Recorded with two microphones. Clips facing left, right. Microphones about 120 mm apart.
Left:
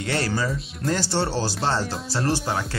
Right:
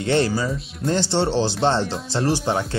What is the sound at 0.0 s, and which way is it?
Speech, 25° right (ahead or behind).